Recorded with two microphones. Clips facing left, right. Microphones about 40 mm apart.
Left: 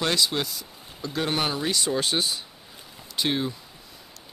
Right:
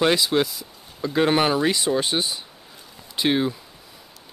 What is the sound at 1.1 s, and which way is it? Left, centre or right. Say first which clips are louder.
Speech: right 7 dB; right.